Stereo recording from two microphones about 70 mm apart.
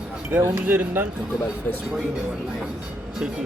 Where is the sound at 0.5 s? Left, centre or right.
Right.